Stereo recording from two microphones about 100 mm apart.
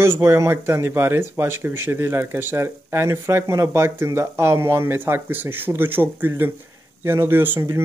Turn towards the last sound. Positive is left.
turn(degrees=-25)  # may be behind; listen again after turning